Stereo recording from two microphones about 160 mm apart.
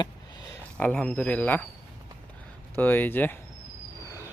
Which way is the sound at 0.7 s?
5° left (ahead or behind).